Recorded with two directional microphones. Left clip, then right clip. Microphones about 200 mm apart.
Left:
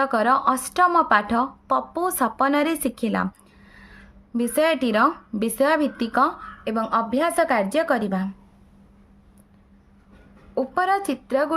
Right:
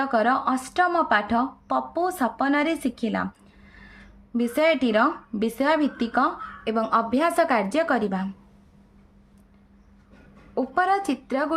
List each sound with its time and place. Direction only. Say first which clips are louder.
0.0 s speech: left 3 dB; 25° left (ahead or behind)
6.7 s a woman's voice: even; 10° left (ahead or behind)
10.5 s a woman's voice: left 1 dB; 15° left (ahead or behind)